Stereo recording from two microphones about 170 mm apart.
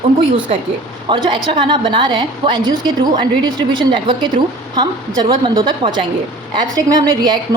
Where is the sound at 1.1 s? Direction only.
25° right (ahead or behind).